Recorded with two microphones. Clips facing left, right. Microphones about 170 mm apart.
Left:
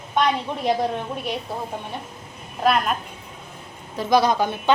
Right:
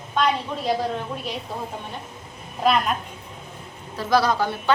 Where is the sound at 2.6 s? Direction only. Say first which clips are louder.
Even; centre (ahead or behind).